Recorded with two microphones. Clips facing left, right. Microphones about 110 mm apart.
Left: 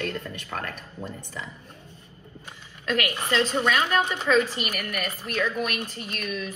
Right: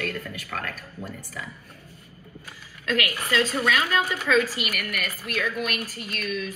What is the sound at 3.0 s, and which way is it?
A woman's voice, 25° left (ahead or behind).